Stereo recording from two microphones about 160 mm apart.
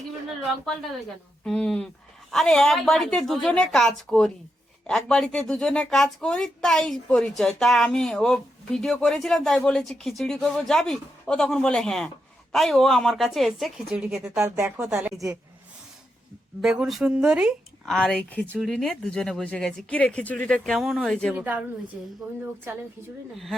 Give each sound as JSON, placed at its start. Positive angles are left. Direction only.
{"t": 0.4, "sound": "speech", "side_deg": 0}
{"t": 14.3, "sound": "speech", "side_deg": -20}
{"t": 16.6, "sound": "speech", "side_deg": 0}
{"t": 21.3, "sound": "speech", "side_deg": -10}
{"t": 23.3, "sound": "speech", "side_deg": 0}